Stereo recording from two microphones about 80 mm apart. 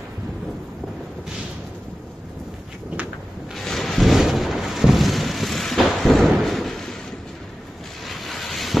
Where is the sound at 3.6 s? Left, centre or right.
Centre.